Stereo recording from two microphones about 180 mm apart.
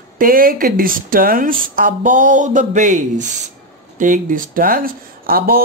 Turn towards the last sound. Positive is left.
turn(degrees=-55)  # may be behind; listen again after turning